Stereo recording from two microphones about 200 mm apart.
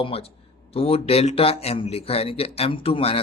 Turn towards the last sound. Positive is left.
turn(degrees=30)  # may be behind; listen again after turning